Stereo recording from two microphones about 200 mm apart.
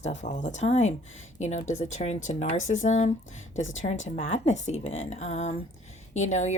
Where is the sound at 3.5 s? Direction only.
75° left (ahead or behind).